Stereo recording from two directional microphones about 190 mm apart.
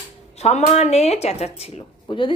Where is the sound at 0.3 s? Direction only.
35° left (ahead or behind).